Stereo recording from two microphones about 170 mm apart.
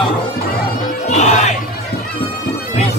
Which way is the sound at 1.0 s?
45° left (ahead or behind).